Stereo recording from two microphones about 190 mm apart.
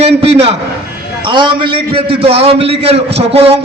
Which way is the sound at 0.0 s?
30° right (ahead or behind).